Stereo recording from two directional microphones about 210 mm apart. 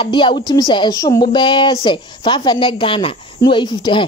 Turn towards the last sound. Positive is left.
turn(degrees=20)  # may be behind; listen again after turning